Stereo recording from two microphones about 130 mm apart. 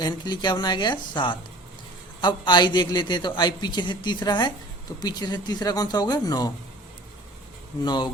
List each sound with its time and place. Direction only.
0.0 s a man's voice: 35° left (ahead or behind)
7.9 s a man's voice: 35° left (ahead or behind)